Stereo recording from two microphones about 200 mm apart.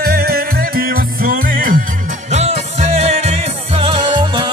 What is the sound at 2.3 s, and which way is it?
Music, 30° right (ahead or behind).